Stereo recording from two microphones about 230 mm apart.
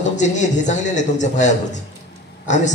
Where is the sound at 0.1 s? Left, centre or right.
Left.